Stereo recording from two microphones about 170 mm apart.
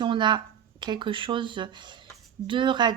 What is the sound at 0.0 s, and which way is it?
A woman's voice, 25° right (ahead or behind).